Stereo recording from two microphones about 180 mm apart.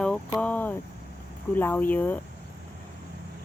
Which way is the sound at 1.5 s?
10° left (ahead or behind).